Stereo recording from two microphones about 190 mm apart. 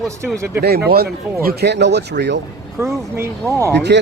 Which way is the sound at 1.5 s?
60° right (ahead or behind).